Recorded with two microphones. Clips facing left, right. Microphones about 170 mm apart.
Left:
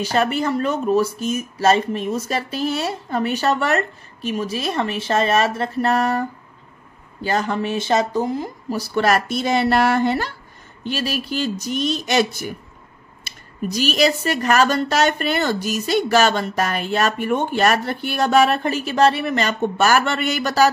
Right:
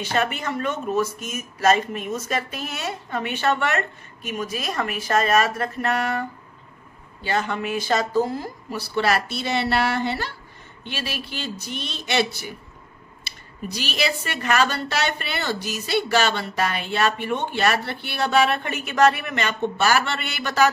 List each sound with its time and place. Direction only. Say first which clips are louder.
0.0 s speech: left 5 dB; 35° left (ahead or behind)
7.2 s speech: left 3 dB; 40° left (ahead or behind); by 8.5 s 20° left (ahead or behind)
8.6 s speech: left 4 dB; 40° left (ahead or behind)